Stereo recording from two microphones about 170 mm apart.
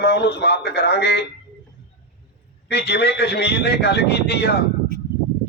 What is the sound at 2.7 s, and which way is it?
A man's voice, 75° left (ahead or behind).